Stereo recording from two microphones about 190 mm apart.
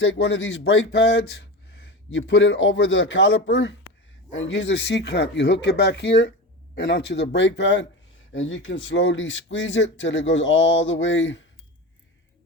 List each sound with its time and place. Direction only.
0.0 s speech: 70° left (ahead or behind)
4.4 s speech: 85° left
8.3 s speech: 85° left